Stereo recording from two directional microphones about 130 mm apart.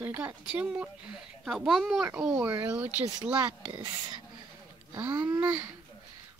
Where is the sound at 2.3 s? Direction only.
20° right (ahead or behind).